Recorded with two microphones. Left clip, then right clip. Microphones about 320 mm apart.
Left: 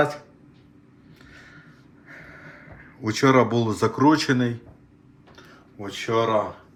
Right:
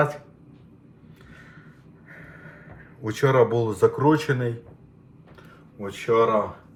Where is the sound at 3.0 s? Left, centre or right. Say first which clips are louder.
Left 1 dB; left.